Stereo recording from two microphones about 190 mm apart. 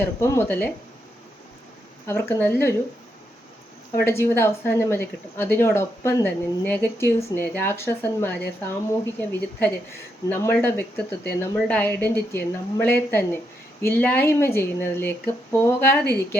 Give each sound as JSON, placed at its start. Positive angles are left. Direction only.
{"t": 0.0, "sound": "a woman's voice", "side_deg": 15}
{"t": 2.0, "sound": "a woman's voice", "side_deg": 15}
{"t": 4.0, "sound": "a woman's voice", "side_deg": 15}